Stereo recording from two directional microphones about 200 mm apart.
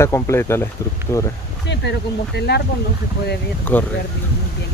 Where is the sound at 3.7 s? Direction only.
10° left (ahead or behind).